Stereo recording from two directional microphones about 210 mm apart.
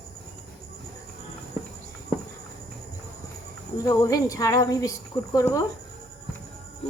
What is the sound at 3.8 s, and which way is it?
Speech, 15° left (ahead or behind).